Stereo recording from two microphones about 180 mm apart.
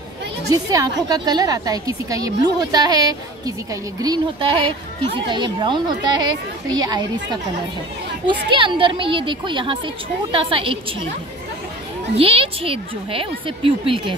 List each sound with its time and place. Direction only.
0.5 s a woman's voice: 20° right (ahead or behind)
12.2 s a woman's voice: 30° right (ahead or behind)